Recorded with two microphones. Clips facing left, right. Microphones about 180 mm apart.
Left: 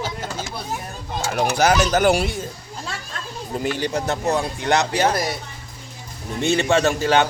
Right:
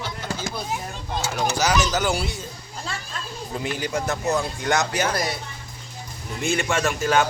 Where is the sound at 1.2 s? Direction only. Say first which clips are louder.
Left 5 dB; 55° left (ahead or behind).